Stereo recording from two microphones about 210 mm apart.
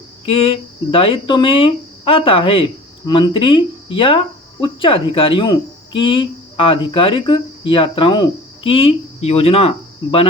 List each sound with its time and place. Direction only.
0.3 s speech: 25° left (ahead or behind)